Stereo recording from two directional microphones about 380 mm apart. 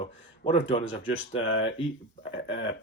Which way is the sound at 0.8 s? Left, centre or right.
Left.